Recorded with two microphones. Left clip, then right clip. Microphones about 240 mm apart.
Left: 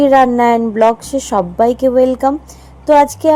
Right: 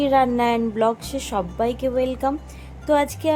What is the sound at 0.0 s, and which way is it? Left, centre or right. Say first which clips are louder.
A woman's voice: left 9 dB; centre.